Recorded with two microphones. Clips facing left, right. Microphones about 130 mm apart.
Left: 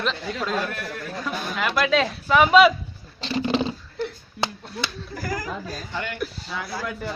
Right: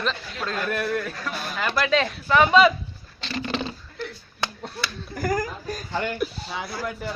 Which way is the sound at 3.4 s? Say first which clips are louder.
Left 5 dB; 20° left (ahead or behind).